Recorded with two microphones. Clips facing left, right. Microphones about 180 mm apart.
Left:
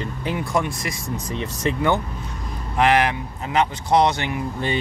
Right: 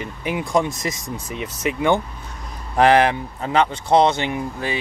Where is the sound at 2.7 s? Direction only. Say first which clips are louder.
Right 4 dB; 30° right (ahead or behind).